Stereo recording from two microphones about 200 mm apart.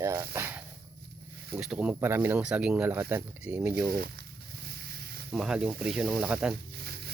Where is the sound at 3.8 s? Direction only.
50° right (ahead or behind).